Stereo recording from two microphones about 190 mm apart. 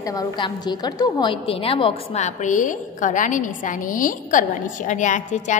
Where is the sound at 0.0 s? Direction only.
20° left (ahead or behind).